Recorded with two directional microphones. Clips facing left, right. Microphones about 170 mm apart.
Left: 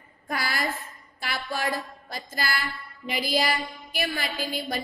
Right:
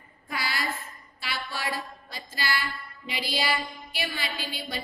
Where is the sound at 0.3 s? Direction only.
45° left (ahead or behind).